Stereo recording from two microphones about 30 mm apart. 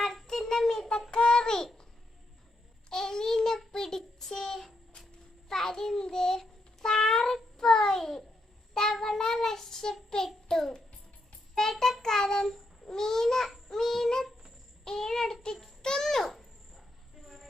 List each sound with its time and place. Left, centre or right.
0.0 s child singing: centre
0.3 s a sound: centre
1.1 s child singing: left
2.9 s child singing: centre
3.7 s a sound: centre
5.5 s child singing: centre
6.8 s cat: centre
7.5 s child singing: centre
12.8 s babbling: centre
13.7 s child singing: centre
15.8 s babbling: centre
16.3 s a sound: centre
17.2 s train: centre